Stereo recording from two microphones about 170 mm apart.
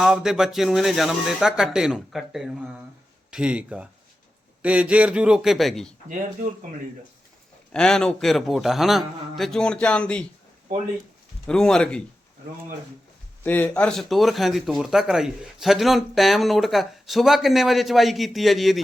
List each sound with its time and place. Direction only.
0.0 s speech: 5° right (ahead or behind)
6.1 s speech: 50° right (ahead or behind)
7.7 s speech: 5° left (ahead or behind)
11.4 s speech: 5° left (ahead or behind)
13.4 s speech: 10° left (ahead or behind)